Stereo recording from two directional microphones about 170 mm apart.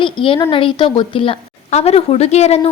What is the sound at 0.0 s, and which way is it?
A woman's voice, 30° left (ahead or behind).